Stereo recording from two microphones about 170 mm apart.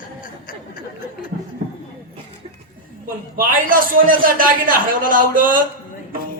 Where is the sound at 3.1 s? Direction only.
55° right (ahead or behind).